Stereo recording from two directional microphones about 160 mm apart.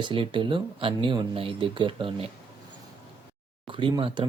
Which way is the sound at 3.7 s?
30° right (ahead or behind).